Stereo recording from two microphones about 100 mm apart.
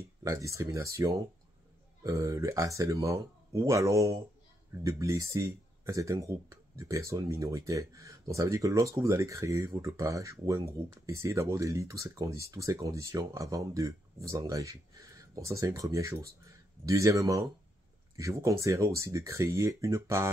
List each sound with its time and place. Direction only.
0.2 s speech: 35° right (ahead or behind)